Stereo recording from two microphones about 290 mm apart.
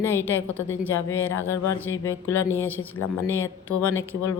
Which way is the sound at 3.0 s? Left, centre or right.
Left.